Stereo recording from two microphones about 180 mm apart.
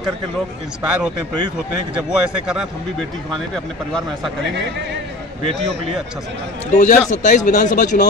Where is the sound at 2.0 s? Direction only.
5° right (ahead or behind).